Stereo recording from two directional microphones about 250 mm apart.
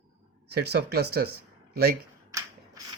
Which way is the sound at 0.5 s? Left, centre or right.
Right.